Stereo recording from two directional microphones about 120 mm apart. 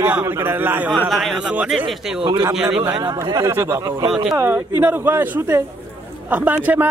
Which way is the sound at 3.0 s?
25° right (ahead or behind).